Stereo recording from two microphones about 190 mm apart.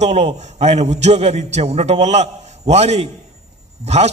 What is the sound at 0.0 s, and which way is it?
A man's voice, 35° right (ahead or behind).